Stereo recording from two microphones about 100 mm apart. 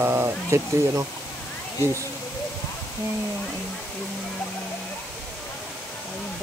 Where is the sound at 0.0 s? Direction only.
25° right (ahead or behind).